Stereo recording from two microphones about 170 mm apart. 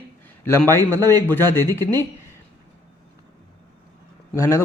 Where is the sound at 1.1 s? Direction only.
15° left (ahead or behind).